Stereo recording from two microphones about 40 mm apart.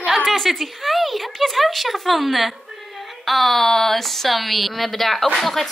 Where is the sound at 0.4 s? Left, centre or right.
Centre.